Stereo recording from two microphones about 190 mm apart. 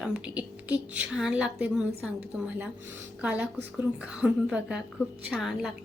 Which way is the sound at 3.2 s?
10° right (ahead or behind).